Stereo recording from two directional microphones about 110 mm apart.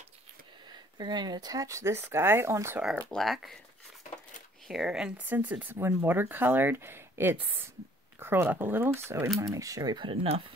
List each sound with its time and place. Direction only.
0.7 s speech: 40° right (ahead or behind); by 2.8 s 25° right (ahead or behind)
3.1 s speech: centre (ahead or behind)
4.6 s speech: 5° right (ahead or behind); by 9.3 s 20° right (ahead or behind)
9.4 s speech: 35° right (ahead or behind)